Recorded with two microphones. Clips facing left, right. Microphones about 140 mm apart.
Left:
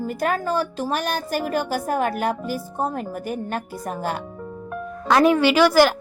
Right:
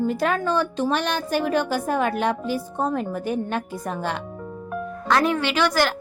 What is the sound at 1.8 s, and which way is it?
Speech, 45° left (ahead or behind).